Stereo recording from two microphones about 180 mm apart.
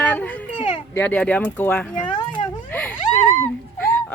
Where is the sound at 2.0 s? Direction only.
25° left (ahead or behind).